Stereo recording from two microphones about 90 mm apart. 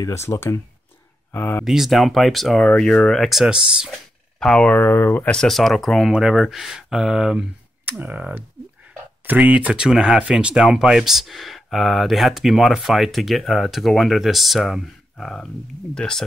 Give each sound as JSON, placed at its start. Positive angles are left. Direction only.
{"t": 0.0, "sound": "speech", "side_deg": 35}
{"t": 1.6, "sound": "speech", "side_deg": 0}
{"t": 4.4, "sound": "speech", "side_deg": 10}
{"t": 5.3, "sound": "speech", "side_deg": 5}
{"t": 8.0, "sound": "speech", "side_deg": -20}